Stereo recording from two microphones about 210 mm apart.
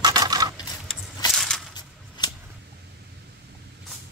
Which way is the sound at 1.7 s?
20° left (ahead or behind).